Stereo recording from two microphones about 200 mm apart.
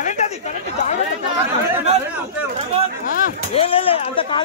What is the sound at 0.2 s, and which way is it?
Chatter, 35° left (ahead or behind).